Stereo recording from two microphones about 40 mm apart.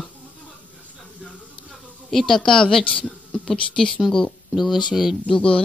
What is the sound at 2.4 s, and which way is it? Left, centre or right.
A man's voice, centre.